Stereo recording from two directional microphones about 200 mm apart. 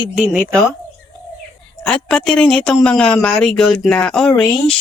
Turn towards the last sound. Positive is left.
turn(degrees=0)  # may be behind; listen again after turning